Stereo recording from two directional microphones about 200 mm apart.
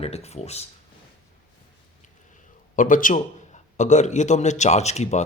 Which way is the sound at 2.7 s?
40° left (ahead or behind).